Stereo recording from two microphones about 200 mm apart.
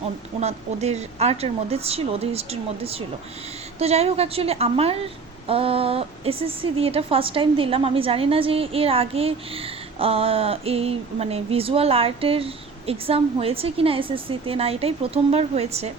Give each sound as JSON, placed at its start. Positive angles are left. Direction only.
{"t": 0.3, "sound": "a woman's voice", "side_deg": -35}